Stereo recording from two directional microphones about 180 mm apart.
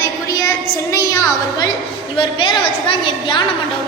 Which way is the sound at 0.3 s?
20° left (ahead or behind).